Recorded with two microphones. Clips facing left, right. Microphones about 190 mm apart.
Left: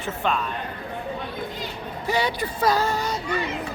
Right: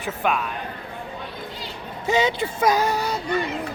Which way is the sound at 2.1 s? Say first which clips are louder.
Right 4 dB; 20° right (ahead or behind).